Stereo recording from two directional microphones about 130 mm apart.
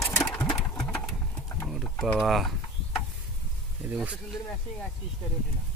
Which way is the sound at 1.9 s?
10° left (ahead or behind).